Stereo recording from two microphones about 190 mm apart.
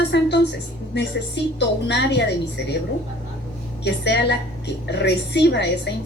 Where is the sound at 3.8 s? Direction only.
65° left (ahead or behind).